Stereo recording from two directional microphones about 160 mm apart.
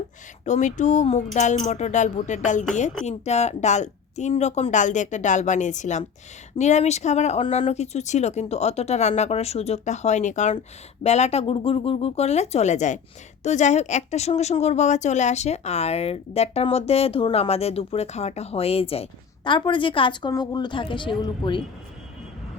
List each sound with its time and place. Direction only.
0.4 s speech: 50° left (ahead or behind); by 21.6 s 30° left (ahead or behind)